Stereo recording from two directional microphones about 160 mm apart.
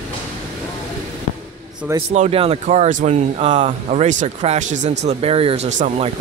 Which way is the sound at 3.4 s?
35° right (ahead or behind).